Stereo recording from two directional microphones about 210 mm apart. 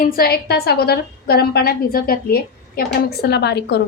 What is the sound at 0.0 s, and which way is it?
A woman's voice, 45° left (ahead or behind).